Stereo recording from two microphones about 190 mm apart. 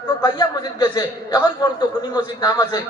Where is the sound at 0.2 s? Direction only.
20° left (ahead or behind).